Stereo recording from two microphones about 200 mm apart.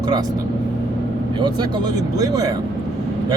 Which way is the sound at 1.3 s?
20° right (ahead or behind).